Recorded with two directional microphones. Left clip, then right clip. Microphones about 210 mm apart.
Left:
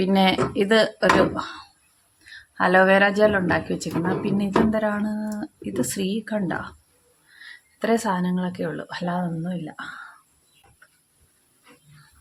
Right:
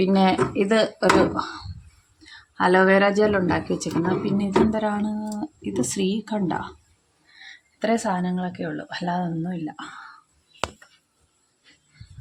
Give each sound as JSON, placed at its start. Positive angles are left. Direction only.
{"t": 0.0, "sound": "speech", "side_deg": 5}